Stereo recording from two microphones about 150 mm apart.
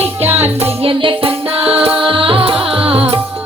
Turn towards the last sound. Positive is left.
turn(degrees=-40)  # may be behind; listen again after turning